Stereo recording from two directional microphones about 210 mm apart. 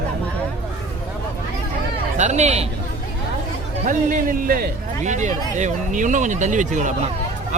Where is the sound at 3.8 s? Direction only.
40° right (ahead or behind).